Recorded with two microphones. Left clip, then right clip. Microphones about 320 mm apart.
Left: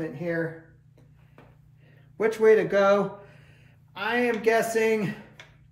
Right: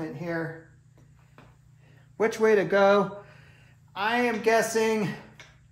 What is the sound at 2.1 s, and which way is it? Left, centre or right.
Speech, centre.